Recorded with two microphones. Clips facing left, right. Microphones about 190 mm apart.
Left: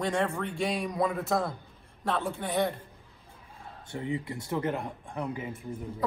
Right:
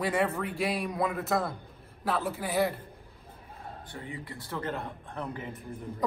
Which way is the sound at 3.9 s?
20° left (ahead or behind).